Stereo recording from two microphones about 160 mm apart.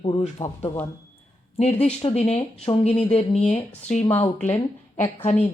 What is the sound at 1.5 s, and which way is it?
A woman's voice, 45° left (ahead or behind).